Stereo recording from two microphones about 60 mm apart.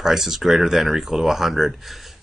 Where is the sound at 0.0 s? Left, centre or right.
Centre.